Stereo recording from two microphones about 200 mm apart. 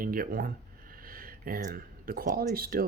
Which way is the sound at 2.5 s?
50° right (ahead or behind).